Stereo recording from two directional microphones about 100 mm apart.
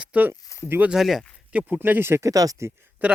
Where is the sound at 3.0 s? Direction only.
15° right (ahead or behind).